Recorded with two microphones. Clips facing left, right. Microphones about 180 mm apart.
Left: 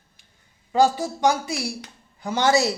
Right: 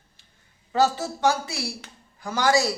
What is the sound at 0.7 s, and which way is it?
Speech, 15° left (ahead or behind).